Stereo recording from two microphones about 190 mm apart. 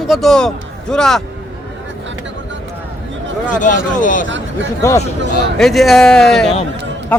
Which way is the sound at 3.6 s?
45° left (ahead or behind).